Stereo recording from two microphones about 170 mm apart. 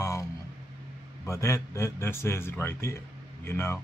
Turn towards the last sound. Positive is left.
turn(degrees=15)  # may be behind; listen again after turning